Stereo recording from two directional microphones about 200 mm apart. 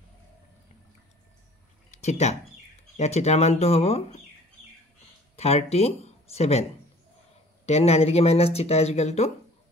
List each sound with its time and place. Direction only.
1.9 s a sound: 35° left (ahead or behind)
3.0 s speech: 35° left (ahead or behind)
5.3 s speech: 30° left (ahead or behind)
7.6 s speech: 30° left (ahead or behind)